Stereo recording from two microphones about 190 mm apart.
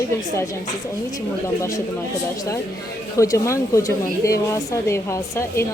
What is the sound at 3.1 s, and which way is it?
A woman's voice, 15° left (ahead or behind).